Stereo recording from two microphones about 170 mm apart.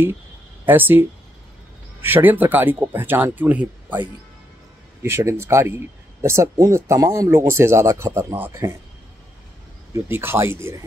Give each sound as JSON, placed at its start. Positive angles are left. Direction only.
{"t": 0.7, "sound": "speech", "side_deg": -10}
{"t": 5.0, "sound": "speech", "side_deg": -15}
{"t": 9.9, "sound": "speech", "side_deg": -15}